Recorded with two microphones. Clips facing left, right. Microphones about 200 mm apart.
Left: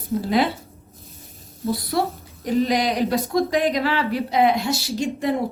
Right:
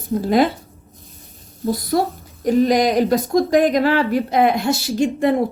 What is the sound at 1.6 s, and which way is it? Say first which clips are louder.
A woman's voice: right 4 dB; 40° right (ahead or behind).